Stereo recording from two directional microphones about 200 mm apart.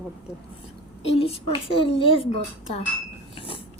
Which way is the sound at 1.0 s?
30° left (ahead or behind).